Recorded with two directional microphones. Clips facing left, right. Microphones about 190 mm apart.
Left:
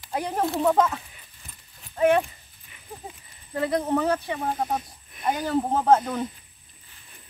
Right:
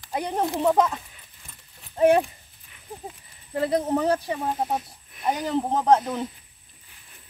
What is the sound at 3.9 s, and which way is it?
Speech, 30° right (ahead or behind).